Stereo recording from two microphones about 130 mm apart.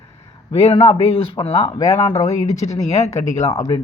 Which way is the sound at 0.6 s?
45° left (ahead or behind).